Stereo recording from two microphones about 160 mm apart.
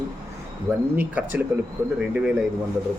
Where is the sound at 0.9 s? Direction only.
10° right (ahead or behind).